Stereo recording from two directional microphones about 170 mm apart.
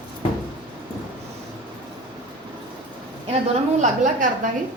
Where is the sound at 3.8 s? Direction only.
50° right (ahead or behind).